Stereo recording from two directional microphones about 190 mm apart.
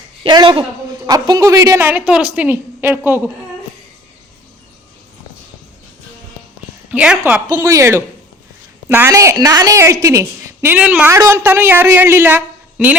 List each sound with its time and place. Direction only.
0.2 s a man's voice: 25° right (ahead or behind)
6.9 s a woman's voice: 5° right (ahead or behind)
7.4 s a woman's voice: 15° right (ahead or behind)